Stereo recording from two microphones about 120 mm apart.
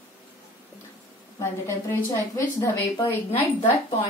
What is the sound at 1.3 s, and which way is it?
A woman's voice, 25° left (ahead or behind).